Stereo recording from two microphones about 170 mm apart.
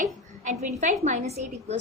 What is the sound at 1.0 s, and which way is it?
Speech, 40° right (ahead or behind).